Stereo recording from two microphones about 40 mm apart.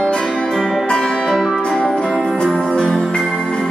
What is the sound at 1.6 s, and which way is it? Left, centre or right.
Music, centre.